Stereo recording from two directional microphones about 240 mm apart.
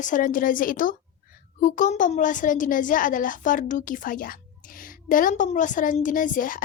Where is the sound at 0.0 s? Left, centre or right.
Left.